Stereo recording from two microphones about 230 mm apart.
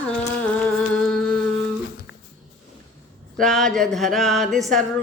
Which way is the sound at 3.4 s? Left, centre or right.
Centre.